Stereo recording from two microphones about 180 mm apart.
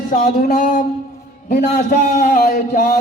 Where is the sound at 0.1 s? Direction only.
50° left (ahead or behind).